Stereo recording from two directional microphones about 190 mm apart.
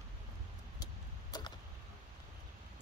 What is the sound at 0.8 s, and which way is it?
Vehicle, 20° left (ahead or behind).